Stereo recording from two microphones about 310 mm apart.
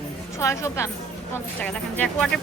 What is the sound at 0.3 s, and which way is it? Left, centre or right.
A woman's voice, centre.